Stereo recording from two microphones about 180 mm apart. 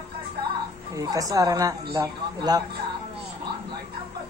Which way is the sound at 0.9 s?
20° right (ahead or behind).